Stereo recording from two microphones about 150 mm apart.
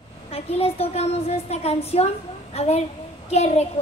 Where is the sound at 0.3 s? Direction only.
40° left (ahead or behind).